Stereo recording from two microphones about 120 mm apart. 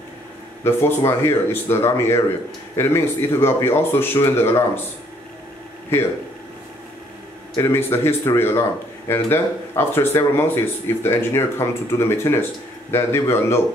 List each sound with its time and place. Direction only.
0.7 s speech: 20° left (ahead or behind)
7.5 s speech: 20° left (ahead or behind)